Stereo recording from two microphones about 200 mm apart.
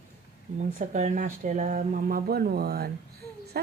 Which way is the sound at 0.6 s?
35° right (ahead or behind).